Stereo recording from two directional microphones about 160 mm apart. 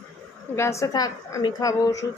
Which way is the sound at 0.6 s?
20° left (ahead or behind).